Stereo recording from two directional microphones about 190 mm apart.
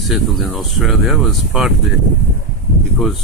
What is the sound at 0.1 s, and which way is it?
Speech, centre (ahead or behind).